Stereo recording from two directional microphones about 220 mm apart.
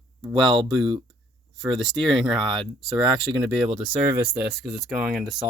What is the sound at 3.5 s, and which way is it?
Speech, centre (ahead or behind).